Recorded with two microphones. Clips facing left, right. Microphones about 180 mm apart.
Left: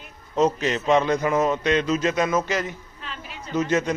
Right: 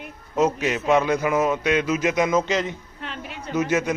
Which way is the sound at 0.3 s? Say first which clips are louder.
Even; 5° right (ahead or behind).